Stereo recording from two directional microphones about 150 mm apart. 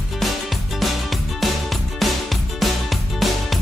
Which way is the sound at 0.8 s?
Centre (ahead or behind).